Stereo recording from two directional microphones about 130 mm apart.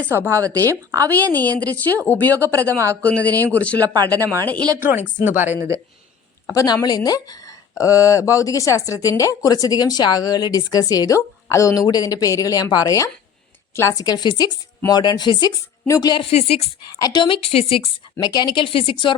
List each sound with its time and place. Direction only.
0.0 s speech: 20° right (ahead or behind)
1.1 s speech: 15° left (ahead or behind)
2.6 s speech: 20° right (ahead or behind)
3.0 s speech: 10° left (ahead or behind)
4.8 s speech: 15° right (ahead or behind)
6.5 s speech: 25° left (ahead or behind)
16.3 s speech: 55° left (ahead or behind)
17.0 s speech: 35° left (ahead or behind)
18.2 s speech: 30° left (ahead or behind)